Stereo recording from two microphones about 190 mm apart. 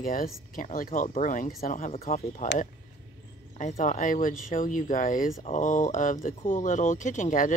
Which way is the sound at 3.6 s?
40° left (ahead or behind).